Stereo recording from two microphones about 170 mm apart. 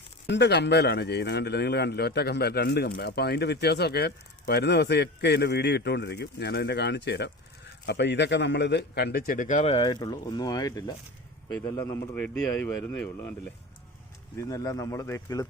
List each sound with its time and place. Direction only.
0.3 s a man's voice: 90° left; by 13.3 s 10° left (ahead or behind)
14.3 s speech: 20° left (ahead or behind)